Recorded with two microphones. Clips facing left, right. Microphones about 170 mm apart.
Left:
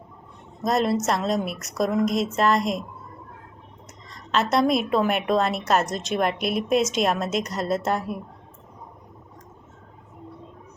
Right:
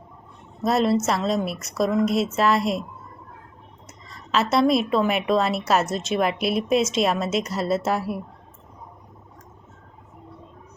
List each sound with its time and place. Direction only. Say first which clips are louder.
0.6 s a woman's voice: right 2 dB; centre (ahead or behind)
4.5 s a woman's voice: right 2 dB; centre (ahead or behind)